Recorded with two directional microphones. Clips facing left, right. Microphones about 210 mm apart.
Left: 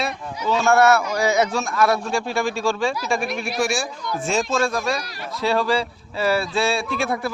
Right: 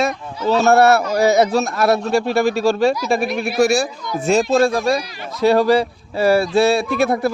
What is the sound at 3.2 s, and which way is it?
Speech, 5° right (ahead or behind).